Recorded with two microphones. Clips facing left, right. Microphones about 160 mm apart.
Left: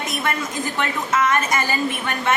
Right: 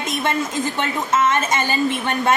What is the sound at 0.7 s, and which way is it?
A woman's voice, 25° right (ahead or behind).